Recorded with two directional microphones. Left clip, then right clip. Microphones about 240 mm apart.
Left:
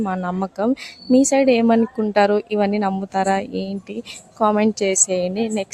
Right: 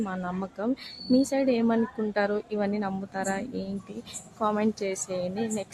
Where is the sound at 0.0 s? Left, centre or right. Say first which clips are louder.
Left 9 dB; left.